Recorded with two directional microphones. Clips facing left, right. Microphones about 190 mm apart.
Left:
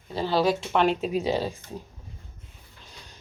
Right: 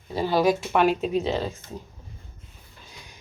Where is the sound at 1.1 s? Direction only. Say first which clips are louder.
Right 1 dB; 10° left (ahead or behind).